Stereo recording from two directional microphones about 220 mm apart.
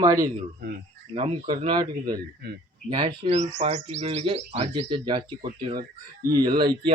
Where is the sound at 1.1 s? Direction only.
25° right (ahead or behind).